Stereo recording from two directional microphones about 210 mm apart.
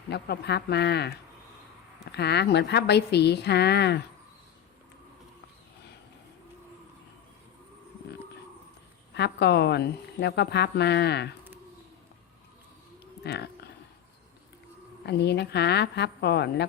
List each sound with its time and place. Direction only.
0.1 s a woman's voice: 50° left (ahead or behind)
2.1 s a woman's voice: 50° left (ahead or behind)
9.1 s a woman's voice: 55° left (ahead or behind)
13.2 s a sound: 50° left (ahead or behind)
15.0 s a woman's voice: 55° left (ahead or behind)